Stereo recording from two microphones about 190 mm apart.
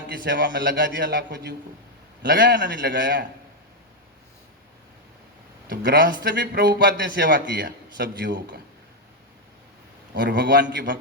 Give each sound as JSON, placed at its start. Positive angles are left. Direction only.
{"t": 0.3, "sound": "a man's voice", "side_deg": -65}
{"t": 5.6, "sound": "a man's voice", "side_deg": -60}
{"t": 10.2, "sound": "a man's voice", "side_deg": -65}